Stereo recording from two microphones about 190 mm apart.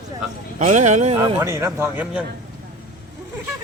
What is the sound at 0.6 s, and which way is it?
Speech, 40° right (ahead or behind).